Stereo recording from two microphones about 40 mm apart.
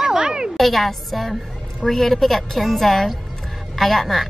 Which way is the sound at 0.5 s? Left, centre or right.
Centre.